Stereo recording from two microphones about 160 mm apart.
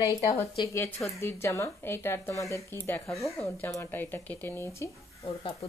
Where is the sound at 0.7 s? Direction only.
10° left (ahead or behind).